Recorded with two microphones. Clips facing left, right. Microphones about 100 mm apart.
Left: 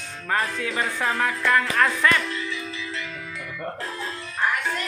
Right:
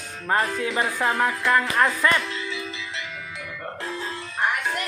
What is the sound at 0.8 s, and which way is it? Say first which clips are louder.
Speech: right 1 dB; 15° right (ahead or behind).